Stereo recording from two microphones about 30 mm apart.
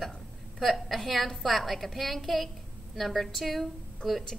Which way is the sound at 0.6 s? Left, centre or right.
Centre.